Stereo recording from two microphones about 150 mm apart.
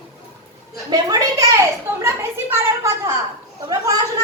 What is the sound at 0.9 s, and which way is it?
A woman's voice, 25° right (ahead or behind).